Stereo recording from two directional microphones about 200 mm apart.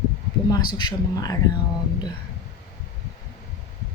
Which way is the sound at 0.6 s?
20° left (ahead or behind).